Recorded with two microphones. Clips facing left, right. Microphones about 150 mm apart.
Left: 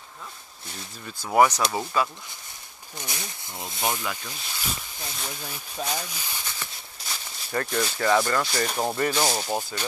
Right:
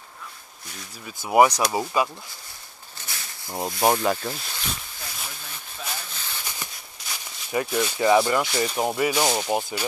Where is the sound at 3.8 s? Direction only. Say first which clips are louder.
Right 8 dB; 50° right (ahead or behind).